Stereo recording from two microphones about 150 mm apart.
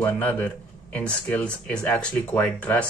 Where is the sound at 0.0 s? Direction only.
10° left (ahead or behind).